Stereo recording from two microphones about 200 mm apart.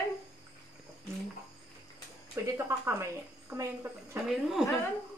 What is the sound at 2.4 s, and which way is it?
Speech, 15° right (ahead or behind).